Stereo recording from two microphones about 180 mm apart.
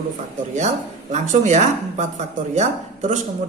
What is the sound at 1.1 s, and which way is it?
Speech, 40° right (ahead or behind).